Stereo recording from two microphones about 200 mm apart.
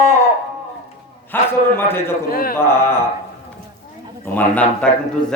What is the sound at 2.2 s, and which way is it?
Speech, 45° left (ahead or behind).